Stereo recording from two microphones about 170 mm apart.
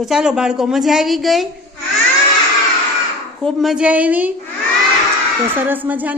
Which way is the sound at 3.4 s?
Centre (ahead or behind).